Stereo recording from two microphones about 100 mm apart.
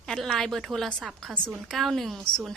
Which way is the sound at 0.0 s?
5° left (ahead or behind).